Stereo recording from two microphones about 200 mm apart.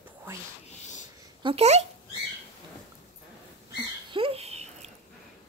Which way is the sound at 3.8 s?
25° right (ahead or behind).